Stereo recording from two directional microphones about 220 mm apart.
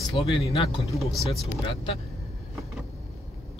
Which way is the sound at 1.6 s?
25° left (ahead or behind).